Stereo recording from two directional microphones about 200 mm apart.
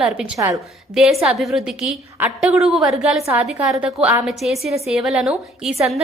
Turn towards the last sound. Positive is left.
turn(degrees=0)  # may be behind; listen again after turning